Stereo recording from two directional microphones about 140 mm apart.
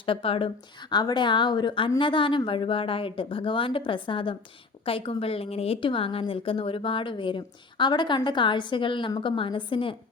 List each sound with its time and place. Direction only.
0.0 s a woman's voice: 40° left (ahead or behind)